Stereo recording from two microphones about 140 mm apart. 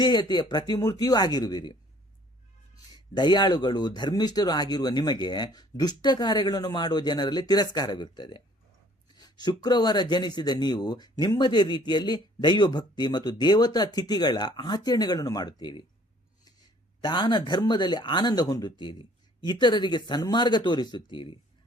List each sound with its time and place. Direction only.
0.0 s speech: 30° left (ahead or behind)
2.9 s speech: 30° left (ahead or behind)
17.0 s speech: 35° left (ahead or behind)